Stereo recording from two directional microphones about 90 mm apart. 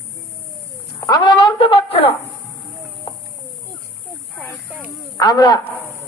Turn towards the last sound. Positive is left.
turn(degrees=45)  # may be behind; listen again after turning